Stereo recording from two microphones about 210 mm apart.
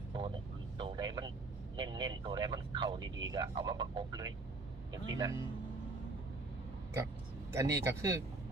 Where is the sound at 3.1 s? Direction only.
65° right (ahead or behind).